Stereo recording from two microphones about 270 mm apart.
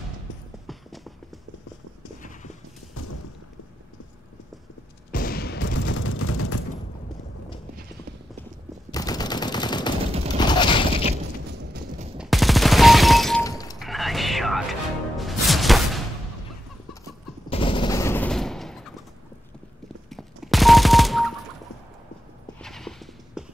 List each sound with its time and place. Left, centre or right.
0.7 s clip-clop: centre
5.1 s mechanisms: left
8.9 s machine gun: centre
10.4 s mechanisms: centre
12.2 s fusillade: centre
13.4 s shatter: centre
13.7 s music: centre
17.5 s gunshot: centre
20.1 s fusillade: centre
22.6 s clip-clop: centre